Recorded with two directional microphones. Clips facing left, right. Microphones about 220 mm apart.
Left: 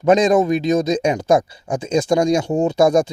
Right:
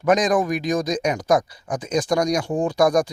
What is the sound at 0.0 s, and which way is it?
Speech, 25° left (ahead or behind).